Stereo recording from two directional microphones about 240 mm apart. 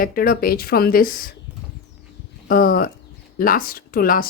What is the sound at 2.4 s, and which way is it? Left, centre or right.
Speech, left.